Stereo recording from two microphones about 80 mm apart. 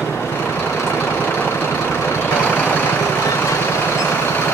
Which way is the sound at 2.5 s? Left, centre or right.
Left.